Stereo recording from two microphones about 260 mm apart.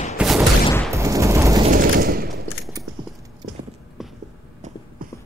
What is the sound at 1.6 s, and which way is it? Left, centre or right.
Fusillade, right.